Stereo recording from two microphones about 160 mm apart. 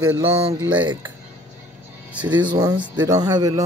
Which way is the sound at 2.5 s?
25° right (ahead or behind).